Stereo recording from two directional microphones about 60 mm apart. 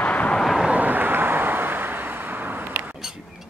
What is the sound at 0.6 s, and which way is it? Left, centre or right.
Vehicle, right.